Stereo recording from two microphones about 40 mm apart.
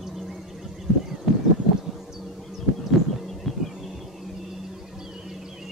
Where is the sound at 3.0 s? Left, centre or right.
Centre.